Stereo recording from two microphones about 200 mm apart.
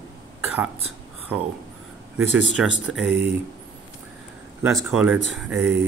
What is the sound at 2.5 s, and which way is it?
Speech, 5° right (ahead or behind).